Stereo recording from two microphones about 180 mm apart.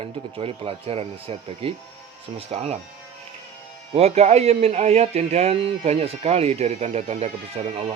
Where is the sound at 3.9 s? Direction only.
35° right (ahead or behind).